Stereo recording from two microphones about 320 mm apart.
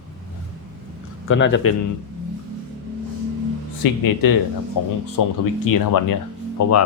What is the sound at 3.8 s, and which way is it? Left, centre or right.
Speech, left.